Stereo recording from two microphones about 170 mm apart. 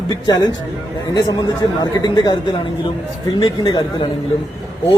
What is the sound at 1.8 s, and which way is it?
A man's voice, 25° left (ahead or behind).